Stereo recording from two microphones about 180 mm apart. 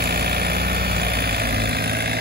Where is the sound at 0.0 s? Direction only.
60° right (ahead or behind).